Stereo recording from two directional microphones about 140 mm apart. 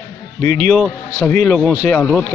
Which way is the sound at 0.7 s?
5° left (ahead or behind).